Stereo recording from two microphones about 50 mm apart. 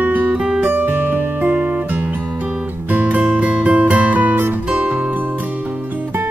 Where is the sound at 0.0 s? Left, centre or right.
Right.